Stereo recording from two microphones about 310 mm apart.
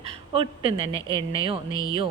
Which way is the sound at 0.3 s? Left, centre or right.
Centre.